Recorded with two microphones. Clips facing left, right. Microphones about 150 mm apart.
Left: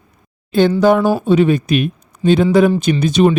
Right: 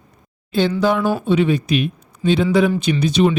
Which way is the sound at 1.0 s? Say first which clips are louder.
Left 4 dB; 40° left (ahead or behind).